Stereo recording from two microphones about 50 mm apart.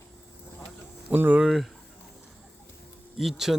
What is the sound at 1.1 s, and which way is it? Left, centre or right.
Speech, right.